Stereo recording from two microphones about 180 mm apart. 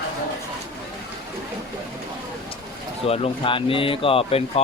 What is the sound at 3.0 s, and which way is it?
Speech, 35° left (ahead or behind).